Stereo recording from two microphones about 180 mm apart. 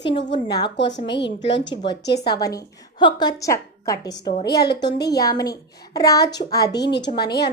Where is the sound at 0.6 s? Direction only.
75° left (ahead or behind).